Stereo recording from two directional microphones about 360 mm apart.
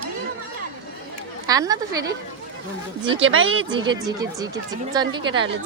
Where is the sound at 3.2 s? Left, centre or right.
Right.